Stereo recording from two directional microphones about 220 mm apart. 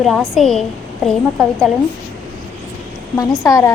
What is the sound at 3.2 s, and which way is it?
Speech, 15° left (ahead or behind).